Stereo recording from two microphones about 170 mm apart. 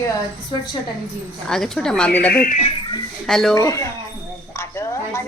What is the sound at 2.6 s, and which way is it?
Speech, 30° left (ahead or behind).